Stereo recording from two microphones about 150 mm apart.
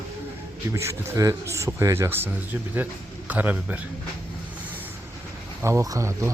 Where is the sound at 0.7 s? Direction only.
20° right (ahead or behind).